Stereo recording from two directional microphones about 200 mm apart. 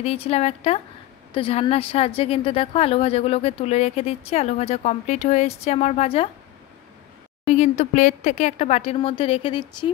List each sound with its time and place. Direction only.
0.0 s a woman's voice: 30° left (ahead or behind)
7.4 s a woman's voice: 35° left (ahead or behind)